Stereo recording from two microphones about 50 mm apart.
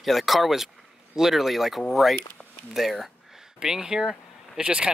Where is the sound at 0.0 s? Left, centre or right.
Centre.